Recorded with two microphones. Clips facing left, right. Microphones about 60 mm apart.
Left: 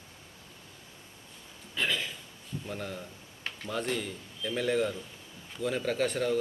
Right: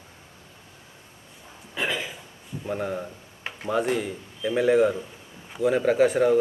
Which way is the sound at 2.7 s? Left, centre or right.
Right.